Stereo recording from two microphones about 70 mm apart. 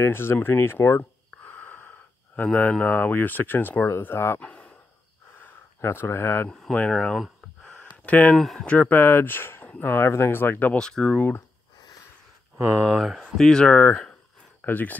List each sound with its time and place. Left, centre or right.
0.0 s speech: left
1.4 s speech: left
4.4 s a sound: centre
5.8 s speech: left
6.9 s a sound: centre
8.0 s speech: left
10.8 s speech: centre
12.8 s speech: centre
13.5 s speech: centre
13.7 s speech: left